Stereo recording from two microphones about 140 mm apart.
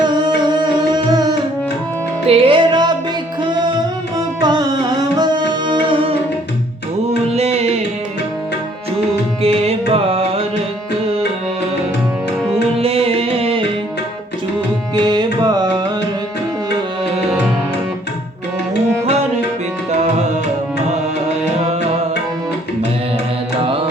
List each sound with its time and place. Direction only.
0.0 s music: 30° right (ahead or behind)
2.2 s music: 45° right (ahead or behind)
5.1 s music: 30° right (ahead or behind)
7.3 s music: 50° right (ahead or behind)
9.4 s music: 45° right (ahead or behind)
12.8 s music: 45° right (ahead or behind)
14.9 s music: 35° right (ahead or behind)